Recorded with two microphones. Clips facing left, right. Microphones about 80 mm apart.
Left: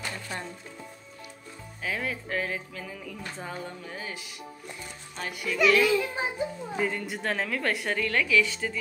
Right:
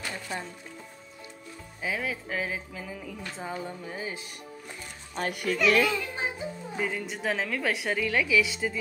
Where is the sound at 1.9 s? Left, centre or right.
Centre.